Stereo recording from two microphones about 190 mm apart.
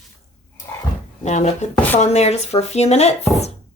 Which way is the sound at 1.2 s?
35° left (ahead or behind).